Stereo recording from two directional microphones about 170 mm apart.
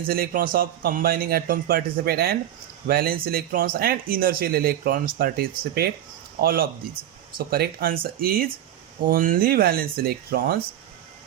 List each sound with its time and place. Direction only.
0.1 s speech: 55° right (ahead or behind)